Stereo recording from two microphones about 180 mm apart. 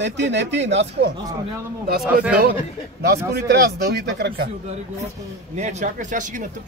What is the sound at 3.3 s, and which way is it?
Speech, 65° right (ahead or behind).